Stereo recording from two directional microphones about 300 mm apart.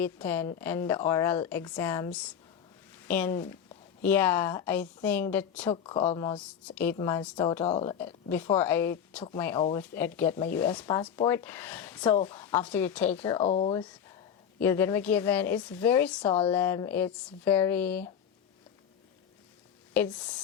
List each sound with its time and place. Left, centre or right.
0.0 s speech: centre
3.1 s speech: centre
5.7 s speech: centre
7.9 s speech: centre
13.3 s speech: centre
14.6 s speech: centre
19.9 s speech: centre